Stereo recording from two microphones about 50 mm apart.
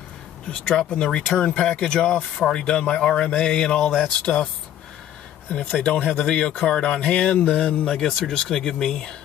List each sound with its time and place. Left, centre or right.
0.7 s speech: centre
5.8 s speech: left
7.6 s speech: centre